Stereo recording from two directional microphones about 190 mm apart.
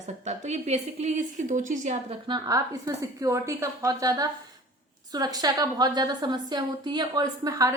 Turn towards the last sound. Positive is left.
turn(degrees=-20)  # may be behind; listen again after turning